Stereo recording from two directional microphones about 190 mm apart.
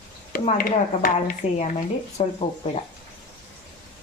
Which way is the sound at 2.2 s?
35° left (ahead or behind).